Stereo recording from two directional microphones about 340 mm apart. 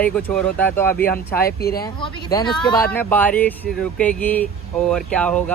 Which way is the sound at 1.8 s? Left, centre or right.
Centre.